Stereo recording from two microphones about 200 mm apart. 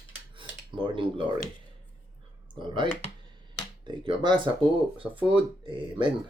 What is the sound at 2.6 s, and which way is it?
Speech, 25° right (ahead or behind).